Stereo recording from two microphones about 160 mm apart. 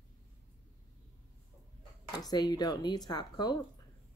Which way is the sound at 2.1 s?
25° left (ahead or behind).